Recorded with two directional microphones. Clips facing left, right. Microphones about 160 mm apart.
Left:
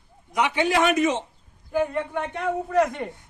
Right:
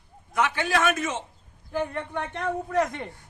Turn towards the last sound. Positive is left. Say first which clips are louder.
# left 4 dB
turn(degrees=0)  # may be behind; listen again after turning